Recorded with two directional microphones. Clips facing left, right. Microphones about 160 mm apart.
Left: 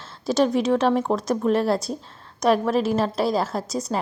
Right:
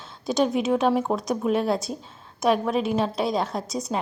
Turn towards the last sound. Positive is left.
turn(degrees=0)  # may be behind; listen again after turning